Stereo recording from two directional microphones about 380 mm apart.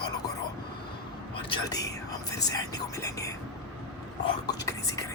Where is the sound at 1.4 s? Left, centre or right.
Centre.